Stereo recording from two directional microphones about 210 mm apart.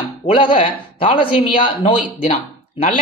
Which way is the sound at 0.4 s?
25° left (ahead or behind).